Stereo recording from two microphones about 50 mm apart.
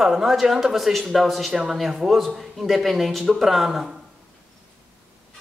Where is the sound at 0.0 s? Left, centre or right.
Centre.